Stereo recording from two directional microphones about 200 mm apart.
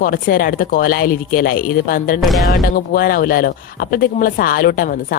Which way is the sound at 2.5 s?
45° left (ahead or behind).